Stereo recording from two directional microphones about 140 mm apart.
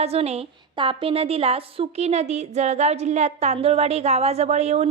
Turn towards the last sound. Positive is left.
turn(degrees=-50)  # may be behind; listen again after turning